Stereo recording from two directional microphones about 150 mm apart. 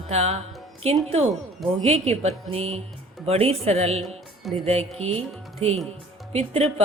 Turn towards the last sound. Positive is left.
turn(degrees=-45)  # may be behind; listen again after turning